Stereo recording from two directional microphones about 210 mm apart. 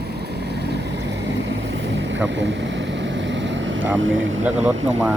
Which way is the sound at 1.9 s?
60° right (ahead or behind).